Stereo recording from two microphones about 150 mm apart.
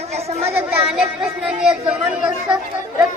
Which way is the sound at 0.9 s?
5° right (ahead or behind).